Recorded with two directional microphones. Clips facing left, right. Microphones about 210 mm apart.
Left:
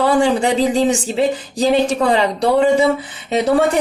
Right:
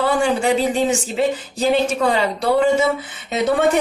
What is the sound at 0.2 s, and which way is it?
A woman's voice, 35° left (ahead or behind).